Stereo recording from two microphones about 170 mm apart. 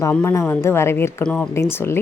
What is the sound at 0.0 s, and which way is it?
A woman's voice, 10° left (ahead or behind).